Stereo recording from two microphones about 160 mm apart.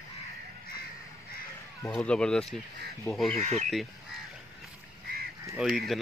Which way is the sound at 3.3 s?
45° right (ahead or behind).